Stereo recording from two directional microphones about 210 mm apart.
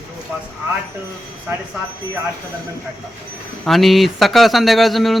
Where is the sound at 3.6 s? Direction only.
Centre (ahead or behind).